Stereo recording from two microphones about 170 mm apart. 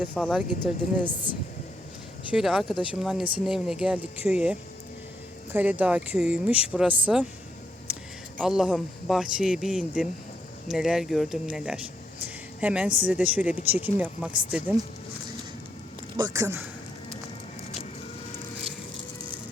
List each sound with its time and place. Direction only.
0.1 s speech: centre (ahead or behind)
0.6 s speech: 10° right (ahead or behind)
2.3 s speech: centre (ahead or behind)
8.4 s speech: 5° right (ahead or behind)
12.2 s a sound: 5° right (ahead or behind)
13.1 s speech: 10° right (ahead or behind)
16.1 s speech: 20° right (ahead or behind)